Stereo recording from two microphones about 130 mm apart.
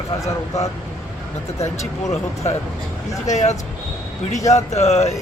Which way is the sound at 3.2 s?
60° left (ahead or behind).